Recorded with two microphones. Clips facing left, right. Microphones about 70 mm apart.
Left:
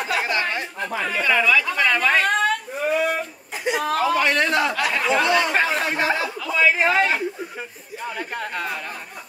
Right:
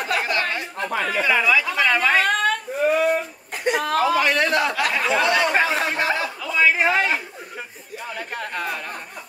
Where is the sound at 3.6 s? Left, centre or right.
Right.